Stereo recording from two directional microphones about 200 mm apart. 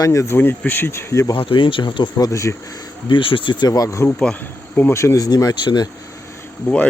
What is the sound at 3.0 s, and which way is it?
Speech, 25° left (ahead or behind).